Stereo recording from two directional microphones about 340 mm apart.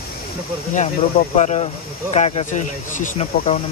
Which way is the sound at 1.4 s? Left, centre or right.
Centre.